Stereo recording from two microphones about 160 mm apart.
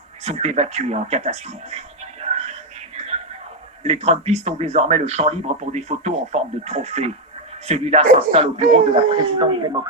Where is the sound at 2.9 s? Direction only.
40° right (ahead or behind).